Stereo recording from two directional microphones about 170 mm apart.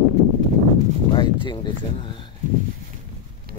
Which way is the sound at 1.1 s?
25° left (ahead or behind).